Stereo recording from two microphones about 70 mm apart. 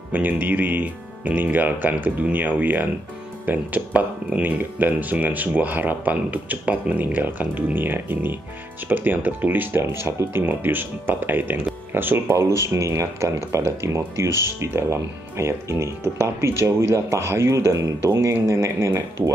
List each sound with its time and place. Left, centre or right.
0.1 s speech: right